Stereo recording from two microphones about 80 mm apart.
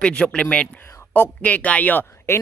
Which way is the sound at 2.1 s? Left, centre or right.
Left.